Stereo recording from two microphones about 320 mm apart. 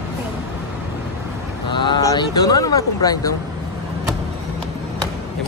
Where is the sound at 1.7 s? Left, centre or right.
Centre.